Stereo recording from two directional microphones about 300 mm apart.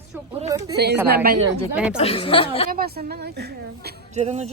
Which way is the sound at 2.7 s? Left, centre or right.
Right.